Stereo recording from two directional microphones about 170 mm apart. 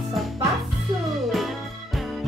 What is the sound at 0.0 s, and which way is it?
Music, centre (ahead or behind).